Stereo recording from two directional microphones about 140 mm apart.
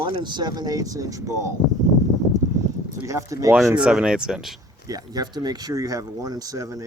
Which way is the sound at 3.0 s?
20° right (ahead or behind).